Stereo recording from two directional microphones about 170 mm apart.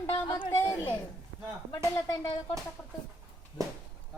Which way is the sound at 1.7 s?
20° left (ahead or behind).